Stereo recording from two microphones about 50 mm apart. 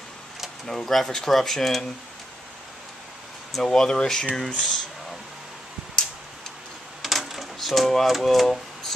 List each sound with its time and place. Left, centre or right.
0.7 s speech: centre
3.5 s speech: centre
7.0 s typewriter: centre